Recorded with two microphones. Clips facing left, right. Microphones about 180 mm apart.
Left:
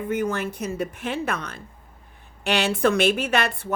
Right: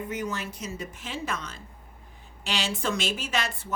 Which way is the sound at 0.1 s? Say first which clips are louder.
Left 7 dB; 55° left (ahead or behind).